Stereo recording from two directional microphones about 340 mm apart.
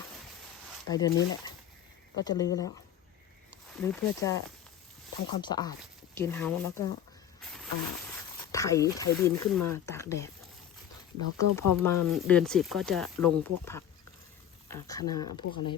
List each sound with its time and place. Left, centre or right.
0.9 s speech: centre
2.1 s speech: centre
7.4 s insect: centre
8.5 s speech: centre
11.3 s speech: centre